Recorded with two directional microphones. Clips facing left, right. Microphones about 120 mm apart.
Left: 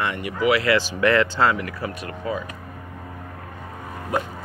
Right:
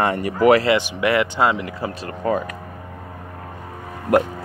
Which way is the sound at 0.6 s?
20° right (ahead or behind).